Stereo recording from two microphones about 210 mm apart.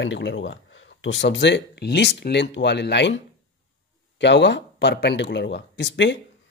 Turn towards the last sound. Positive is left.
turn(degrees=60)  # may be behind; listen again after turning